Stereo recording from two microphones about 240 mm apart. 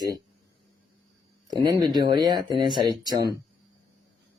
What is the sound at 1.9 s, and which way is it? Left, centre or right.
Speech, centre.